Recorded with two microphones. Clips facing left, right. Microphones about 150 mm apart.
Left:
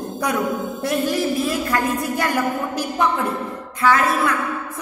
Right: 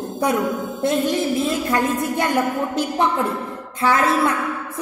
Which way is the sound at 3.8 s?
25° right (ahead or behind).